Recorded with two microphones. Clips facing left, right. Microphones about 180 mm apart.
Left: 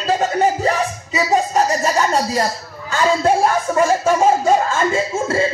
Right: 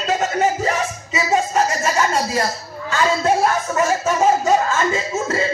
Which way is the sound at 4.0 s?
30° left (ahead or behind).